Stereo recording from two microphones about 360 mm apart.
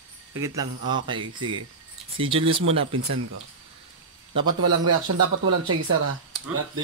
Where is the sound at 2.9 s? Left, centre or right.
Right.